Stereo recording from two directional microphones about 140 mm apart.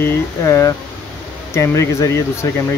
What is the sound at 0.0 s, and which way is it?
Speech, 20° left (ahead or behind).